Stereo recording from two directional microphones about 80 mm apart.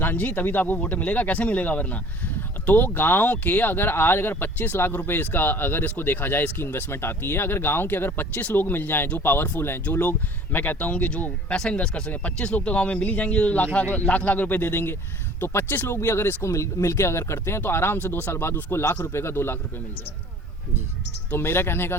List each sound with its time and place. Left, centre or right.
0.0 s speech: left
21.2 s speech: left